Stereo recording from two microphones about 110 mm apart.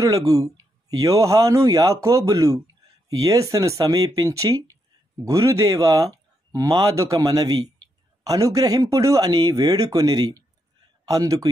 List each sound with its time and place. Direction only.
0.0 s speech: 30° right (ahead or behind)